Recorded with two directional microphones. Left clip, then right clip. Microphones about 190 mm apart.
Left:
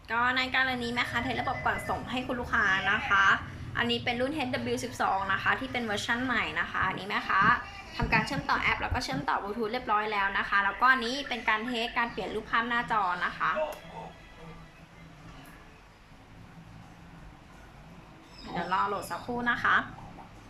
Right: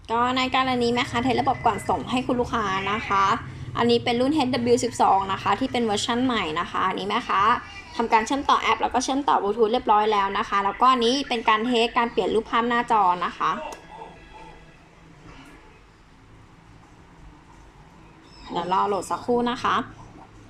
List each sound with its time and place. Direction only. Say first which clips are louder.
0.1 s a woman's voice: right 5 dB; 25° right (ahead or behind)
18.5 s a woman's voice: right 6 dB; 30° right (ahead or behind)